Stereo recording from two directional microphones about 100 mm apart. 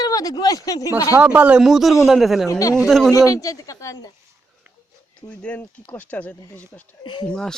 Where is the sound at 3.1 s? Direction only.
35° left (ahead or behind).